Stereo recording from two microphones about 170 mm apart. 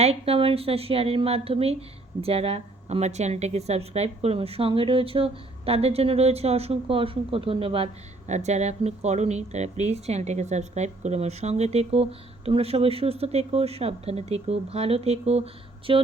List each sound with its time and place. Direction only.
0.0 s speech: 35° right (ahead or behind)